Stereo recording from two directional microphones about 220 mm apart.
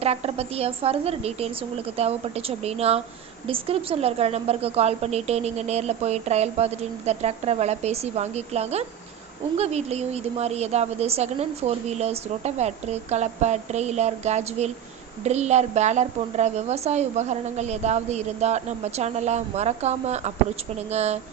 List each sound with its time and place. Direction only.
0.0 s a woman's voice: 25° right (ahead or behind)